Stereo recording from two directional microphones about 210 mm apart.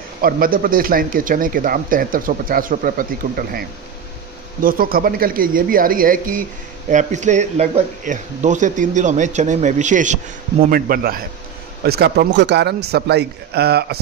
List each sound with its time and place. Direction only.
0.2 s a man's voice: 45° right (ahead or behind)